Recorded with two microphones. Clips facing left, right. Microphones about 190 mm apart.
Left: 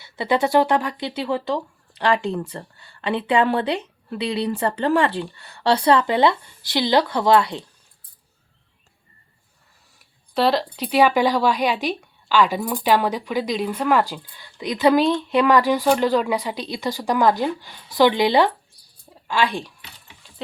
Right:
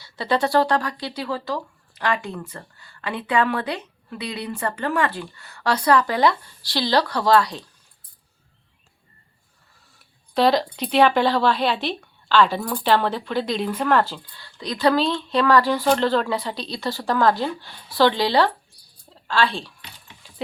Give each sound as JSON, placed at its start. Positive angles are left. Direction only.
{"t": 0.0, "sound": "speech", "side_deg": 20}
{"t": 10.0, "sound": "speech", "side_deg": 5}